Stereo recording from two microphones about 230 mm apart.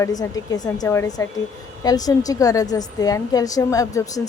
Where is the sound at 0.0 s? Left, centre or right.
Centre.